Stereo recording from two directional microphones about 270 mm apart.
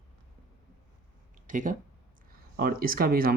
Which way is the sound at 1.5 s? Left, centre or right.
Right.